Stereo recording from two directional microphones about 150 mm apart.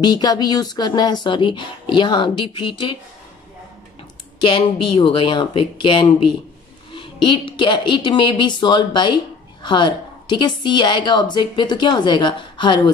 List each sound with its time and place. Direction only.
0.0 s speech: 25° left (ahead or behind)
4.4 s speech: 35° left (ahead or behind)